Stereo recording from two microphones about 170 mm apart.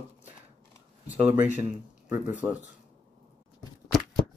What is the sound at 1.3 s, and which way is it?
Speech, 10° right (ahead or behind).